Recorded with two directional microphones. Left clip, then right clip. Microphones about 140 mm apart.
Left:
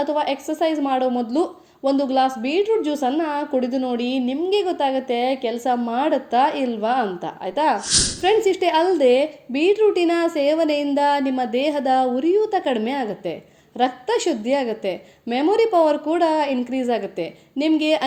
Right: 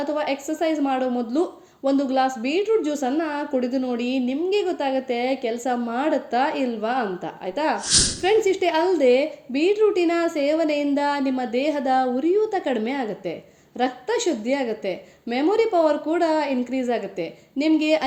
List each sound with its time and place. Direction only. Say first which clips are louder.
0.0 s a woman's voice: left 3 dB; 35° left (ahead or behind)
7.9 s speech: even; centre (ahead or behind)
8.2 s a woman's voice: left 4 dB; 30° left (ahead or behind)